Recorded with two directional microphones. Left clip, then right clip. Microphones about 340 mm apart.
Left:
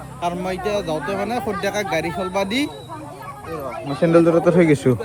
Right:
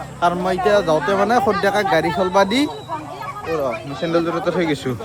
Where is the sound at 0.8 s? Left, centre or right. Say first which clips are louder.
Right 7 dB; right.